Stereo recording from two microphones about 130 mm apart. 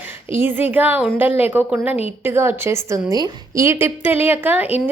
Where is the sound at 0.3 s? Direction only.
15° right (ahead or behind).